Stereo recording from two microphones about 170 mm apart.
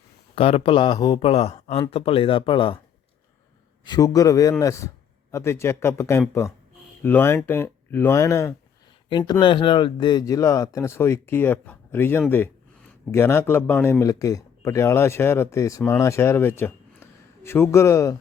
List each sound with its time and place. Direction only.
0.3 s speech: 30° left (ahead or behind)
3.8 s speech: 25° left (ahead or behind)